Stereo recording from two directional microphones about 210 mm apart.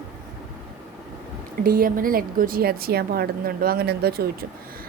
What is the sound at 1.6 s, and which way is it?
A woman's voice, 45° right (ahead or behind).